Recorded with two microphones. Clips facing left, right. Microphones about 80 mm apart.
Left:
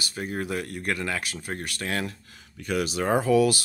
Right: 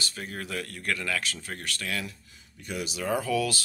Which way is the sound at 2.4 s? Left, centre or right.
Left.